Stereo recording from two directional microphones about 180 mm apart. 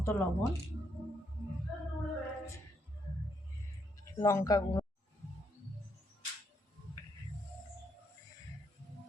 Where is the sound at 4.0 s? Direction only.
15° left (ahead or behind).